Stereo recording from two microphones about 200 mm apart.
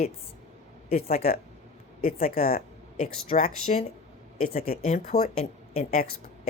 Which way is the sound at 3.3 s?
35° left (ahead or behind).